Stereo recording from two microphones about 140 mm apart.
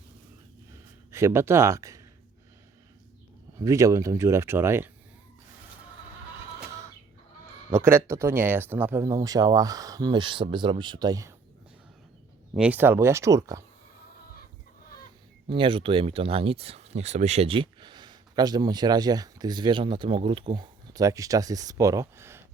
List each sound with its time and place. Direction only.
1.1 s speech: 20° right (ahead or behind)
3.6 s speech: 20° right (ahead or behind)
7.7 s speech: 15° right (ahead or behind)
12.5 s speech: 10° right (ahead or behind)
15.4 s speech: 35° right (ahead or behind); by 22.4 s 20° right (ahead or behind)